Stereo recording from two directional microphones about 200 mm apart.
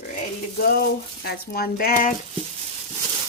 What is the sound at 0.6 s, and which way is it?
Speech, 50° left (ahead or behind).